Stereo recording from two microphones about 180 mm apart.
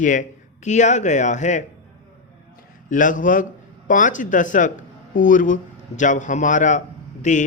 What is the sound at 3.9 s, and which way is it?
A man's voice, 45° left (ahead or behind).